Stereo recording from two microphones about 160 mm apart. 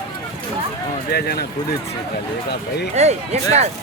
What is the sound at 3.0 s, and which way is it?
Speech, 45° right (ahead or behind).